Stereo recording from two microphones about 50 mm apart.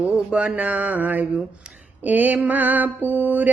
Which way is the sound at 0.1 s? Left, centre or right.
Right.